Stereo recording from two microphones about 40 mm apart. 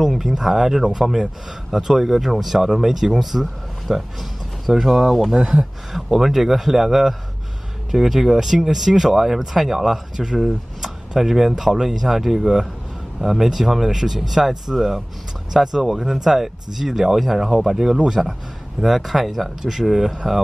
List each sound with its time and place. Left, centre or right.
0.3 s speech: centre
6.0 s speech: centre